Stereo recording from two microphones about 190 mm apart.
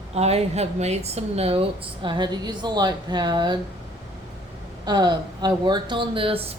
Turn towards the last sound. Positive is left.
turn(degrees=-30)  # may be behind; listen again after turning